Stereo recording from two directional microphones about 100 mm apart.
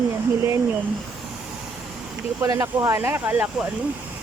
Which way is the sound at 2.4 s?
30° right (ahead or behind).